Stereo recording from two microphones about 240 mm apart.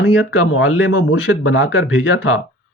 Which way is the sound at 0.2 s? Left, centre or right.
Left.